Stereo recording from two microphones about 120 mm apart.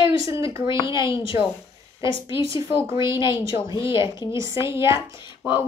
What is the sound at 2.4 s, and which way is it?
Speech, 50° left (ahead or behind).